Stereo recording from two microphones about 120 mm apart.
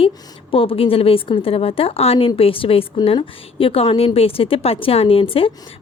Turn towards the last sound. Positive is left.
turn(degrees=50)  # may be behind; listen again after turning